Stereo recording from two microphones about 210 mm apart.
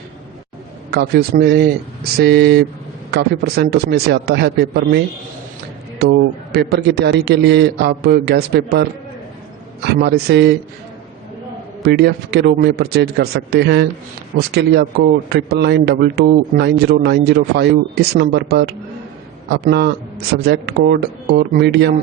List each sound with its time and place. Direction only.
0.9 s speech: 50° right (ahead or behind)
11.8 s speech: 50° right (ahead or behind)